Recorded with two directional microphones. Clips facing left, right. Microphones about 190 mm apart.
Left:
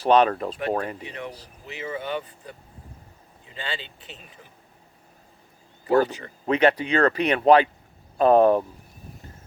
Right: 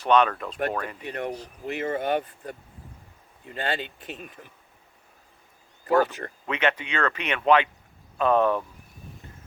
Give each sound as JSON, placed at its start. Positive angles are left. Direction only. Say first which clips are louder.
{"t": 0.0, "sound": "speech", "louder": "left 3 dB", "side_deg": 35}
{"t": 1.0, "sound": "speech", "louder": "right 5 dB", "side_deg": -55}
{"t": 6.4, "sound": "speech", "louder": "left 7 dB", "side_deg": 35}